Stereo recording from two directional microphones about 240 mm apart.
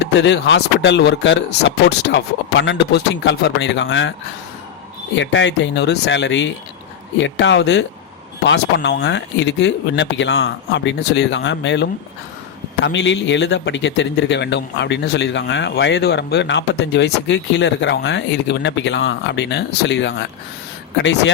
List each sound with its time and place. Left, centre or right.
0.0 s speech: left
5.1 s speech: left